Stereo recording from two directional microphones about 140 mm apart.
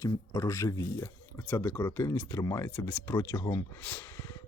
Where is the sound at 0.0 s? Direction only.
20° left (ahead or behind).